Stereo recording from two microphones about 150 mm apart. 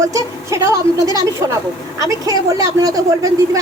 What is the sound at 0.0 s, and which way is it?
A woman's voice, 20° right (ahead or behind).